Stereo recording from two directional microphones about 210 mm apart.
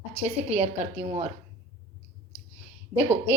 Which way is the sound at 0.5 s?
30° right (ahead or behind).